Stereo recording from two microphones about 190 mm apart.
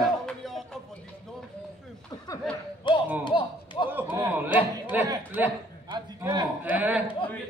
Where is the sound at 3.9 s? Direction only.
10° right (ahead or behind).